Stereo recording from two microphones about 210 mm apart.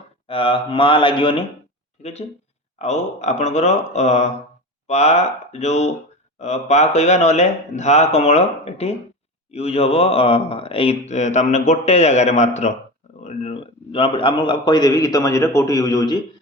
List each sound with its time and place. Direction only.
0.3 s a man's voice: 25° left (ahead or behind)